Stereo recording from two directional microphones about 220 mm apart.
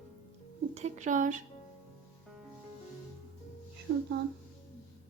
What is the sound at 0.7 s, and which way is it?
Speech, 30° right (ahead or behind).